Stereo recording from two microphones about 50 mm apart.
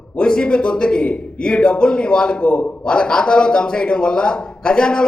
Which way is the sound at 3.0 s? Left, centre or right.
Centre.